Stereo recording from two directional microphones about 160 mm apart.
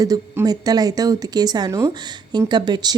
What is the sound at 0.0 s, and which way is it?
A woman's voice, 20° right (ahead or behind).